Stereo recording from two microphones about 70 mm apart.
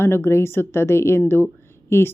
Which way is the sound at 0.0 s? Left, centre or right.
Left.